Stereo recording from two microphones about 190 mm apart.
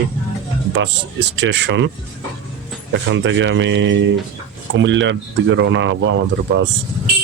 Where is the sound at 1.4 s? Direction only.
70° right (ahead or behind).